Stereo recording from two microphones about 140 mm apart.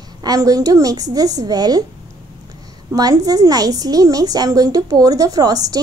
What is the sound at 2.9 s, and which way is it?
A woman's voice, 25° right (ahead or behind).